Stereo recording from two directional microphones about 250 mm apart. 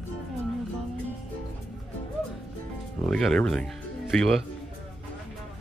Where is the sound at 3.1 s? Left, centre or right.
Centre.